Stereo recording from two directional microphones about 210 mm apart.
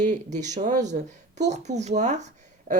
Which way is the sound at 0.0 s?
35° right (ahead or behind).